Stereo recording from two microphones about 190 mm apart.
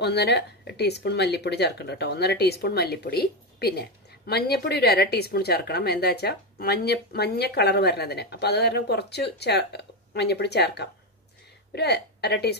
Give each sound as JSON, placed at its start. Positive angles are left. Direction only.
{"t": 0.0, "sound": "speech", "side_deg": 60}